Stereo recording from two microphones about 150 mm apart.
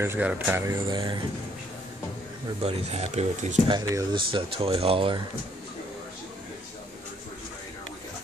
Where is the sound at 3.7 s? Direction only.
30° right (ahead or behind).